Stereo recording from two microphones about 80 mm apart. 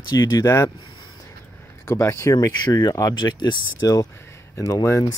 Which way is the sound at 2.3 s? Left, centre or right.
Left.